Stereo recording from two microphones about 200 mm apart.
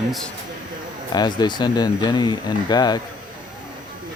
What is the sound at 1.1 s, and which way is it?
Speech, 20° left (ahead or behind).